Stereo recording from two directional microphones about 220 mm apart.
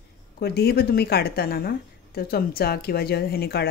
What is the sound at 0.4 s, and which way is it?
A woman's voice, 45° left (ahead or behind).